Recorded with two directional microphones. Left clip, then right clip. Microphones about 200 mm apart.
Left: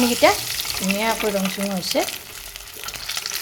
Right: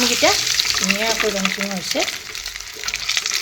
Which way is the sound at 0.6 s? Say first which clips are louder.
Right 8 dB; 10° right (ahead or behind).